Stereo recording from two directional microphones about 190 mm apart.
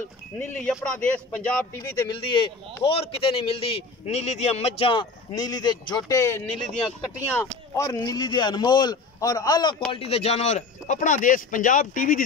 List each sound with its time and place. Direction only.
0.4 s a man's voice: 5° left (ahead or behind)
2.0 s speech: 25° left (ahead or behind)
9.9 s speech: 30° left (ahead or behind)